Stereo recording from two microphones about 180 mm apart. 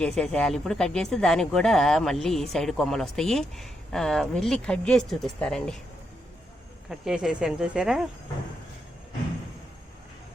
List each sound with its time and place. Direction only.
0.0 s speech: 5° left (ahead or behind)
7.0 s speech: 5° right (ahead or behind)